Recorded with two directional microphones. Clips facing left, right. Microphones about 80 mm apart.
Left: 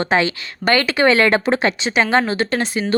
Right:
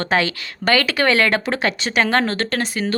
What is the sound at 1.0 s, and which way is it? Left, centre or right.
Speech, left.